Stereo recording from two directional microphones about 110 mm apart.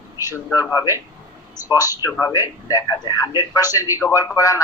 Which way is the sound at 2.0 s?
30° left (ahead or behind).